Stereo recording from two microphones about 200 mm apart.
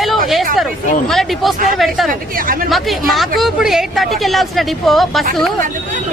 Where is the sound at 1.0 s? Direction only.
Centre (ahead or behind).